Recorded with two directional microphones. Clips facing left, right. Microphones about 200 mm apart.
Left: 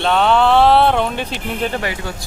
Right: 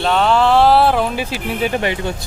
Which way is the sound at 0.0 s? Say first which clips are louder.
Even; centre (ahead or behind).